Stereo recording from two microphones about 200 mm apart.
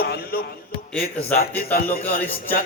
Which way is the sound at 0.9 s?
5° left (ahead or behind).